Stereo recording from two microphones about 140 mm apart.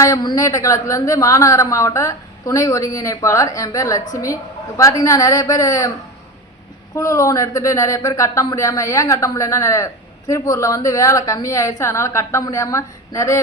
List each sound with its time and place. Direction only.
0.0 s speech: 25° left (ahead or behind)
6.9 s speech: 20° left (ahead or behind)